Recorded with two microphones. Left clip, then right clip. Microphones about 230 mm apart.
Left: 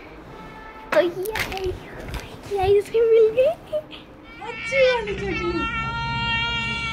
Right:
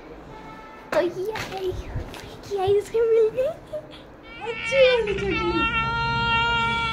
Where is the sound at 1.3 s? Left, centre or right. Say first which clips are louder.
Left 3 dB; left.